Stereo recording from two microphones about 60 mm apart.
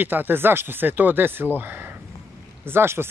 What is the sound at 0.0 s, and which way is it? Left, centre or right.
Speech, right.